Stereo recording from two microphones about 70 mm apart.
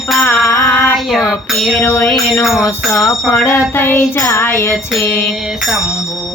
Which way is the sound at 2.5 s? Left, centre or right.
Left.